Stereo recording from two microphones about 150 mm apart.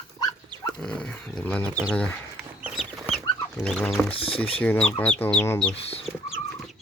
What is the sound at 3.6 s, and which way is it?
Speech, 5° left (ahead or behind).